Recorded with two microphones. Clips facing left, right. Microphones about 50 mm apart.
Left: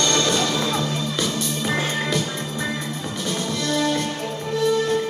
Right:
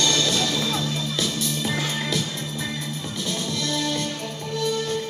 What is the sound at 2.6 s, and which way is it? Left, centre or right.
Music, centre.